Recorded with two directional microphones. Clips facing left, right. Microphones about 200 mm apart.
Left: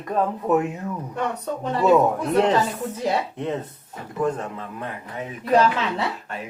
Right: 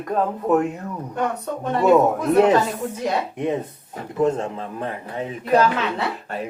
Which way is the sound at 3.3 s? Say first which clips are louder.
Right 4 dB; 15° right (ahead or behind).